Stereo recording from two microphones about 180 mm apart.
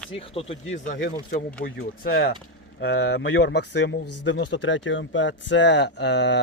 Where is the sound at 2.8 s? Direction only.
70° left (ahead or behind).